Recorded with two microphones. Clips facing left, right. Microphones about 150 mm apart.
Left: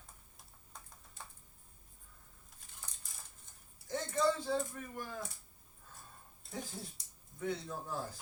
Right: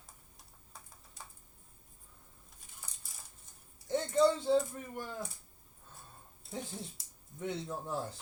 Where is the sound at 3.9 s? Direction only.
25° right (ahead or behind).